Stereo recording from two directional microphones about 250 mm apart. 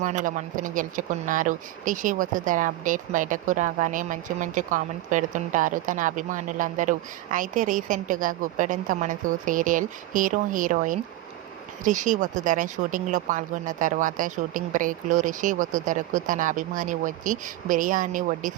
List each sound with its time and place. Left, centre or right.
0.0 s speech: right